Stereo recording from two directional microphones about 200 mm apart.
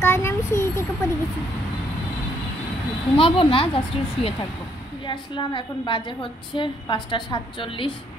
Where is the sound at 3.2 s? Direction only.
25° left (ahead or behind).